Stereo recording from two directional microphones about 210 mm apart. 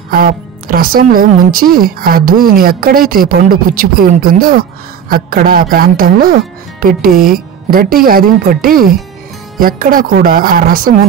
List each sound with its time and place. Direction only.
0.1 s speech: 45° right (ahead or behind)